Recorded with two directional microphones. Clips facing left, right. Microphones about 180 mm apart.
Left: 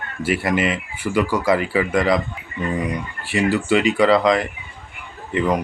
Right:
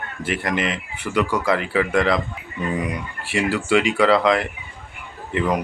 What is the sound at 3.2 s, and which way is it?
Speech, centre (ahead or behind).